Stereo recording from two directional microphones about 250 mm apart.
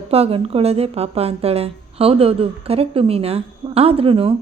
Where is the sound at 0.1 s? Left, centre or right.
Right.